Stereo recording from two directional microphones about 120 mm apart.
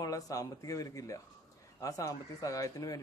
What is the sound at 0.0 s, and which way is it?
Speech, 30° left (ahead or behind).